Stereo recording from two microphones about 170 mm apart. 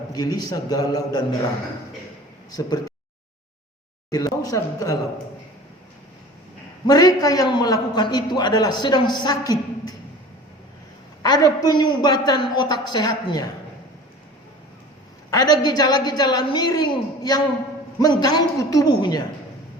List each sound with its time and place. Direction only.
0.1 s a man's voice: 20° left (ahead or behind)
2.6 s a man's voice: 25° left (ahead or behind)
4.1 s a man's voice: 20° left (ahead or behind)
6.8 s a man's voice: 20° left (ahead or behind)
11.2 s a man's voice: 20° left (ahead or behind)
15.3 s a man's voice: 20° left (ahead or behind)